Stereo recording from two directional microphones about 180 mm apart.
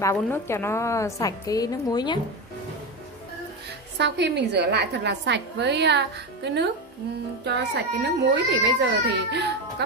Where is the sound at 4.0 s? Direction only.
70° right (ahead or behind).